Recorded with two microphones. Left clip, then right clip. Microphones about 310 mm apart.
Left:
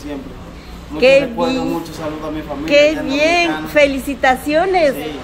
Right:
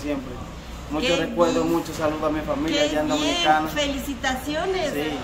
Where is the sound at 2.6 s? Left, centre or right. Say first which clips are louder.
Left 12 dB; centre.